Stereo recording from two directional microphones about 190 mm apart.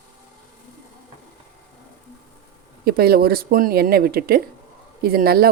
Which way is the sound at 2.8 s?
55° right (ahead or behind).